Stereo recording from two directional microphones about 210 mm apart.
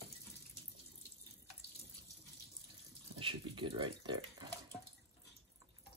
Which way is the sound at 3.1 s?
25° right (ahead or behind).